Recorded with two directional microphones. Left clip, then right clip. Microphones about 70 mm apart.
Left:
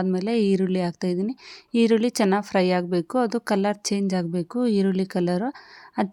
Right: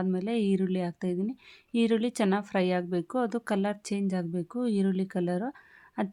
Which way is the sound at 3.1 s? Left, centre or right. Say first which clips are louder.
Left 7 dB; left.